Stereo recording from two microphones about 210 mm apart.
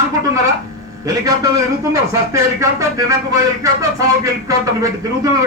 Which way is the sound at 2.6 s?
15° right (ahead or behind).